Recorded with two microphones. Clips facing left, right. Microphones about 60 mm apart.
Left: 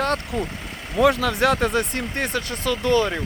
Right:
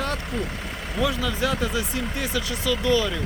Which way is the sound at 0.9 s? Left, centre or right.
Left.